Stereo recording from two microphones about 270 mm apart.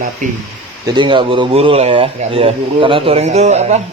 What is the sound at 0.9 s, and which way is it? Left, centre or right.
Speech, centre.